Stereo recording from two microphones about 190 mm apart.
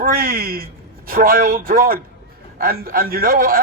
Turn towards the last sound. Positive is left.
turn(degrees=-50)  # may be behind; listen again after turning